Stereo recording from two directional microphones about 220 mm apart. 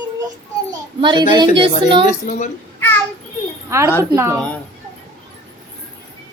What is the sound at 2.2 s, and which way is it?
Speech, 35° left (ahead or behind).